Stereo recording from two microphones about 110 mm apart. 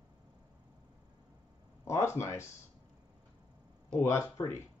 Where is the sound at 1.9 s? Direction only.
20° left (ahead or behind).